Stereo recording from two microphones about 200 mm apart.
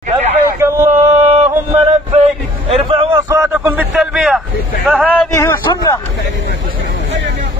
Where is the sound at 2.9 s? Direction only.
25° right (ahead or behind).